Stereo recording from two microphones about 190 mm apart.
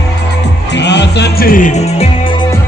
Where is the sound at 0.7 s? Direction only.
65° left (ahead or behind); by 2.0 s 40° left (ahead or behind).